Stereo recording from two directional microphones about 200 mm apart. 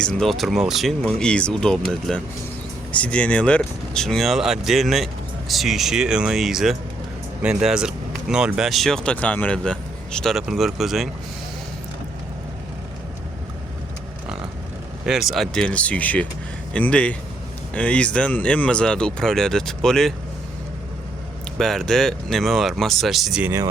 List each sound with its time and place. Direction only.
0.0 s speech: centre (ahead or behind)
15.0 s speech: centre (ahead or behind)
21.6 s speech: centre (ahead or behind)